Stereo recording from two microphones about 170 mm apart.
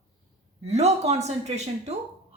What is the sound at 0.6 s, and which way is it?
A woman's voice, 40° right (ahead or behind).